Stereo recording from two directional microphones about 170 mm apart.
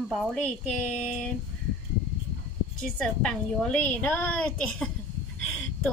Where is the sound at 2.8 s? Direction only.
5° left (ahead or behind).